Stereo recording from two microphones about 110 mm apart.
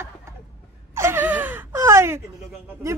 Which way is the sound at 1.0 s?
20° right (ahead or behind).